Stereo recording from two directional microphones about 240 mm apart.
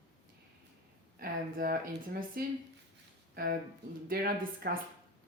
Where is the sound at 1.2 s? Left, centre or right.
Right.